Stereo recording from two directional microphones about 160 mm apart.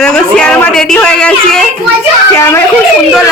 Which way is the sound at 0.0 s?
5° left (ahead or behind).